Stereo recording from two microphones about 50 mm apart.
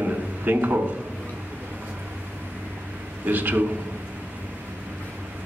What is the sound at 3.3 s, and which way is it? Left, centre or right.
Speech, right.